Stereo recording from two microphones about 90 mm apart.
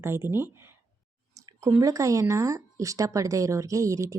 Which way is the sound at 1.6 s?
35° right (ahead or behind).